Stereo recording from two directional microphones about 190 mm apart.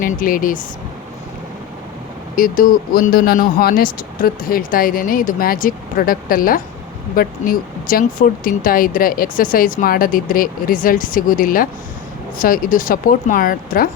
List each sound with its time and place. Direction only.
0.0 s speech: 45° left (ahead or behind)
2.3 s speech: 45° left (ahead or behind)